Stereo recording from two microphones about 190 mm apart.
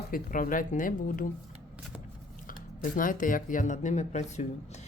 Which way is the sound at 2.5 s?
45° left (ahead or behind).